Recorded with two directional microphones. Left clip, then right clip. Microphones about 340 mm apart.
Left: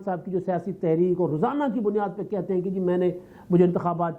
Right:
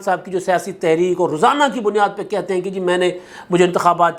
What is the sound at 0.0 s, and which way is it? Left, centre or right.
Speech, centre.